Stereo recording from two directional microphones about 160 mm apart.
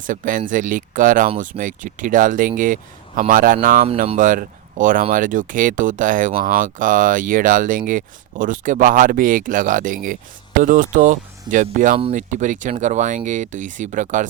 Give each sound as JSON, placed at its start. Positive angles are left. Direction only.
{"t": 0.0, "sound": "speech", "side_deg": -55}